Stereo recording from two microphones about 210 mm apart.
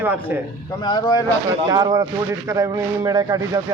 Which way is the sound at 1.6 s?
20° right (ahead or behind).